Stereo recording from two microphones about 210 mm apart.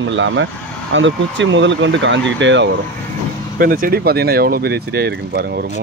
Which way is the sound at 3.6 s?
45° right (ahead or behind).